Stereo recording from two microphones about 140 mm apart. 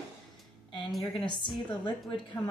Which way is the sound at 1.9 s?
35° left (ahead or behind).